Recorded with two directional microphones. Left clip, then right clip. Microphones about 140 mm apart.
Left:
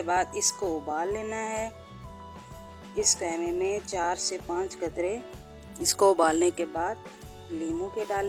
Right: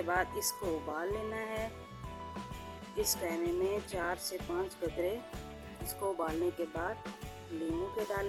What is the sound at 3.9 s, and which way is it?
Speech, 45° left (ahead or behind).